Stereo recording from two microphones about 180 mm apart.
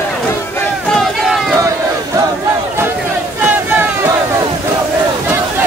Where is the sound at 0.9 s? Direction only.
Centre (ahead or behind).